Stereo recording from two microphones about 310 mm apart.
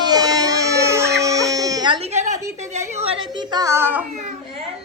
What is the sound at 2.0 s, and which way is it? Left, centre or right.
A woman's voice, right.